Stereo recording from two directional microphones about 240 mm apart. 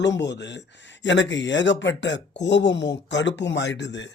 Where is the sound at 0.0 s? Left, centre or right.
Left.